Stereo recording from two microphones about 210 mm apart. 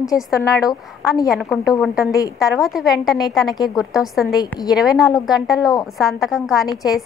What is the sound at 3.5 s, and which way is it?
Speech, 20° left (ahead or behind).